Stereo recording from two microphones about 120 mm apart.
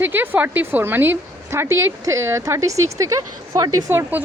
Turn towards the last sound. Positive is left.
turn(degrees=-30)  # may be behind; listen again after turning